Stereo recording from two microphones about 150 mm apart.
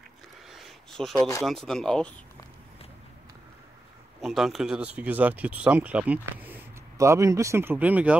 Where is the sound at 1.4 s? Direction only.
5° left (ahead or behind).